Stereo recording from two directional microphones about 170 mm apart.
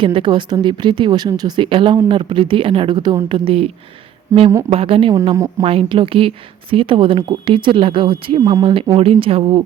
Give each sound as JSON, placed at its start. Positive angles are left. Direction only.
{"t": 0.0, "sound": "a woman's voice", "side_deg": -30}
{"t": 4.3, "sound": "speech", "side_deg": -15}
{"t": 4.7, "sound": "speech", "side_deg": -35}
{"t": 5.2, "sound": "a woman's voice", "side_deg": -20}
{"t": 5.6, "sound": "speech", "side_deg": -30}